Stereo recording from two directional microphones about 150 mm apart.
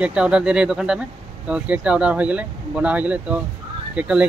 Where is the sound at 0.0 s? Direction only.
5° right (ahead or behind).